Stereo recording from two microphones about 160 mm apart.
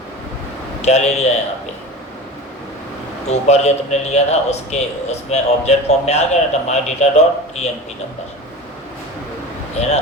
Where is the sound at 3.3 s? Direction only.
45° left (ahead or behind).